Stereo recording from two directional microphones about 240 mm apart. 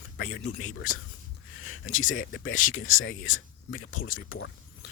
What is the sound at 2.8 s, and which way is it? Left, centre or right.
Speech, left.